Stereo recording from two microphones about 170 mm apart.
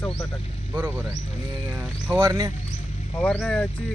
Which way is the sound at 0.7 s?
10° right (ahead or behind).